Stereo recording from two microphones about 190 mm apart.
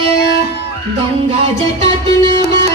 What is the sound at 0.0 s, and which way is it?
Music, 60° left (ahead or behind).